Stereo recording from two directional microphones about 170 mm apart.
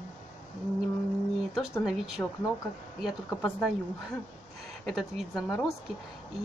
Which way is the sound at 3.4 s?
5° left (ahead or behind).